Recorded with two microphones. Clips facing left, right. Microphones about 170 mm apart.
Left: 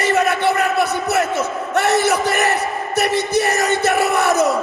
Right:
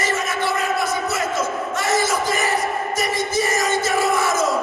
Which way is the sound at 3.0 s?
65° left (ahead or behind).